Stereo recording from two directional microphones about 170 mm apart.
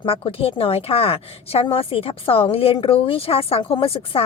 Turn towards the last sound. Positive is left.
turn(degrees=35)  # may be behind; listen again after turning